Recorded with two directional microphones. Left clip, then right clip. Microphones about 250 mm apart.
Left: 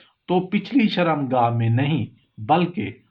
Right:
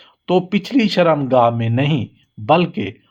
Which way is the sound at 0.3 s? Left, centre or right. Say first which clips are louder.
Right 5 dB; right.